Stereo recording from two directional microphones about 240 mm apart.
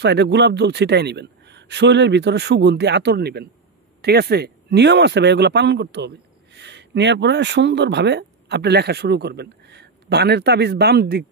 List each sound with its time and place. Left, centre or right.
0.0 s a man's voice: right